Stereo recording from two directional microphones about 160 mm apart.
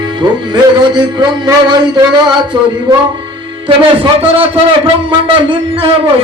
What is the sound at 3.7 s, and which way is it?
Music, 35° right (ahead or behind).